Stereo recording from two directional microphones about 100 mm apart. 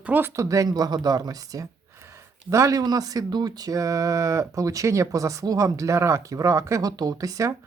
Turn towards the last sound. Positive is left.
turn(degrees=-35)  # may be behind; listen again after turning